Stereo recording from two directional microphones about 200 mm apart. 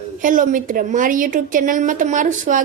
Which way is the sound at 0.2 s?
40° right (ahead or behind).